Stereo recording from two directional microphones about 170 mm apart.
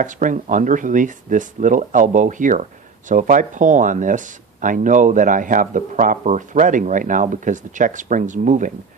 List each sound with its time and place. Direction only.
0.0 s speech: 50° right (ahead or behind)